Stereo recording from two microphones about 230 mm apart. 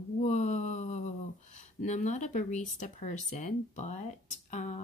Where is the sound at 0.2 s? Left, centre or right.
Left.